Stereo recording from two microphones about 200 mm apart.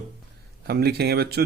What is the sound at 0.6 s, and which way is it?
Speech, 55° right (ahead or behind).